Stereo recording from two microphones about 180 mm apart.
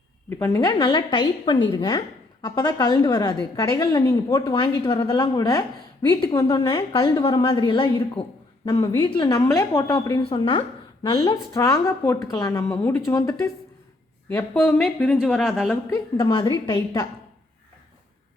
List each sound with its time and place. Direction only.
0.3 s a woman's voice: 20° left (ahead or behind)
14.6 s a woman's voice: 5° left (ahead or behind)
15.9 s a woman's voice: 25° left (ahead or behind)